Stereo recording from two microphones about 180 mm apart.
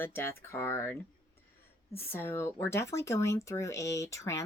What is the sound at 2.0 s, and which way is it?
Speech, 10° left (ahead or behind).